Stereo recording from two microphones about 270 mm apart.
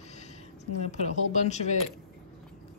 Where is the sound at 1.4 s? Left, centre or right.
Left.